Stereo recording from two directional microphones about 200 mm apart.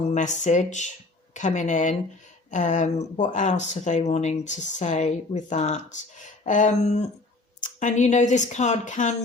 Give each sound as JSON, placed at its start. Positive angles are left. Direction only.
{"t": 0.0, "sound": "speech", "side_deg": 35}